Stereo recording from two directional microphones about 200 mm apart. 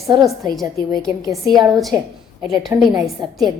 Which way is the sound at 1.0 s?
Centre (ahead or behind).